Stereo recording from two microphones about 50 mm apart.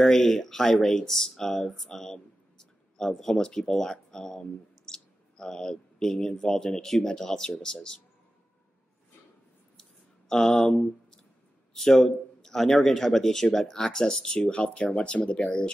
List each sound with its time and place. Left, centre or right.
0.0 s speech: centre
9.8 s a sound: centre
11.7 s speech: centre